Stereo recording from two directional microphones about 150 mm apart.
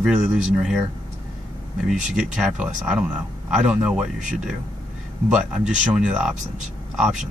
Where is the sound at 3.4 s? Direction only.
5° right (ahead or behind).